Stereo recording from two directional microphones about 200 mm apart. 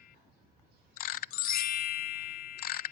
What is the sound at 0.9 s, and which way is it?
Music, 45° left (ahead or behind).